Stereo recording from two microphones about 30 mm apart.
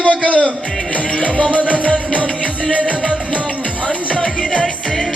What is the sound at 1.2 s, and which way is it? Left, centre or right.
Music, left.